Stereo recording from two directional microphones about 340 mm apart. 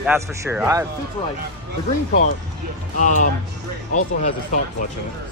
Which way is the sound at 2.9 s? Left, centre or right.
Left.